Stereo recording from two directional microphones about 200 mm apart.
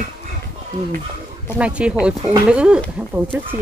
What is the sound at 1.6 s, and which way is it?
Speech, 5° right (ahead or behind).